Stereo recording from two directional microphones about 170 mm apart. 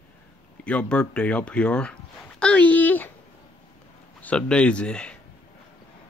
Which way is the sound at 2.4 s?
5° left (ahead or behind).